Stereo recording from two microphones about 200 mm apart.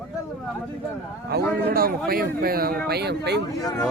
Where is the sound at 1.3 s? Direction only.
50° right (ahead or behind).